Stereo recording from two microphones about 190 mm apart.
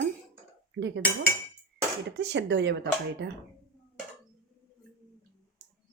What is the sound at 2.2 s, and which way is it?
A woman's voice, 65° right (ahead or behind).